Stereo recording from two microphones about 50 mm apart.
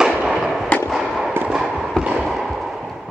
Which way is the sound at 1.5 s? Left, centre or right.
Centre.